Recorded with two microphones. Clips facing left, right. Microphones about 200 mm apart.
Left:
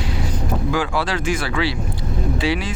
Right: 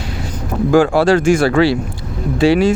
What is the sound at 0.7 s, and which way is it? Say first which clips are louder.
Speech: right 14 dB; 45° right (ahead or behind).